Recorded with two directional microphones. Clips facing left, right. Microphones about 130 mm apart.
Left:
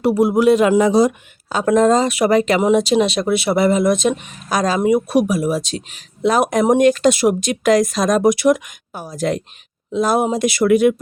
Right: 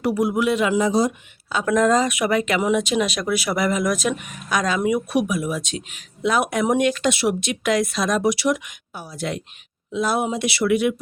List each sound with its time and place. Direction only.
0.0 s speech: 30° left (ahead or behind)
0.8 s speech: 75° left (ahead or behind)
1.5 s speech: 40° left (ahead or behind)
1.7 s speech: 25° left (ahead or behind); by 11.0 s 45° left (ahead or behind)